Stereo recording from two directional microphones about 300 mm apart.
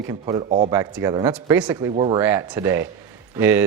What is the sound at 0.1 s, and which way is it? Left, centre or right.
Speech, centre.